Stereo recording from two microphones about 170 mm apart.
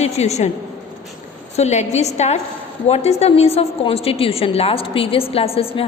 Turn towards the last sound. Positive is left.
turn(degrees=35)  # may be behind; listen again after turning